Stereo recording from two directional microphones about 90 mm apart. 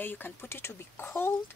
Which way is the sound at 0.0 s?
20° left (ahead or behind).